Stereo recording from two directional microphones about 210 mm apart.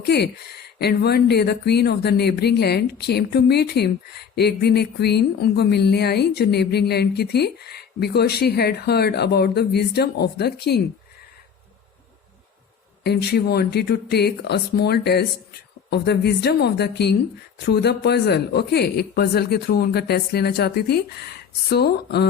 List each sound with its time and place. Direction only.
0.8 s speech: 50° left (ahead or behind)
13.0 s speech: 50° left (ahead or behind)